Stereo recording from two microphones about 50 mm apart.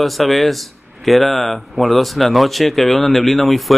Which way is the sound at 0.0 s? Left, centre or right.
Centre.